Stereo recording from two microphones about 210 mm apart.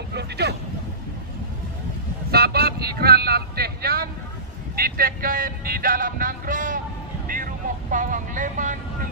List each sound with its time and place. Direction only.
0.1 s speech: 50° right (ahead or behind)
2.3 s music: 50° right (ahead or behind)
7.2 s vehicle: 40° right (ahead or behind)